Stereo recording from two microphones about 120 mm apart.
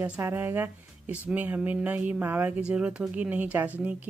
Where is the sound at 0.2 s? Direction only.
20° right (ahead or behind).